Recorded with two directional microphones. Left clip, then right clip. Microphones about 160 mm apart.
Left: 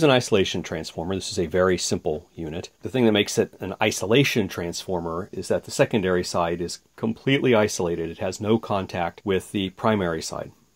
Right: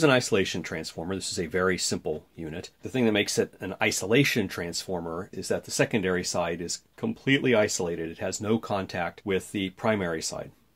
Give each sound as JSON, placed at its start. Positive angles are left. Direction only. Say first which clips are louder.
{"t": 0.0, "sound": "speech", "louder": "left 3 dB", "side_deg": 25}
{"t": 8.3, "sound": "speech", "louder": "left 4 dB", "side_deg": 25}
{"t": 9.2, "sound": "speech", "louder": "left 4 dB", "side_deg": 40}